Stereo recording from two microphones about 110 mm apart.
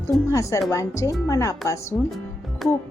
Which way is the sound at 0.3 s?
30° left (ahead or behind).